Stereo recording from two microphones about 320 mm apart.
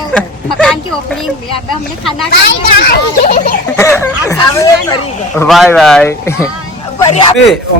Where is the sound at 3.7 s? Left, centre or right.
Centre.